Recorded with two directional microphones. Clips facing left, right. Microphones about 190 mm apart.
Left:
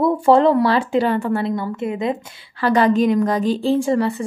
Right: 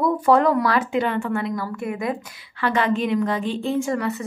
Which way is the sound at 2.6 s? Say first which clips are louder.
Left 6 dB; 35° left (ahead or behind).